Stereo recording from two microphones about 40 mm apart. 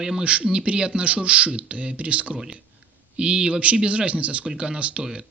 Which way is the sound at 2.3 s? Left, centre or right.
Centre.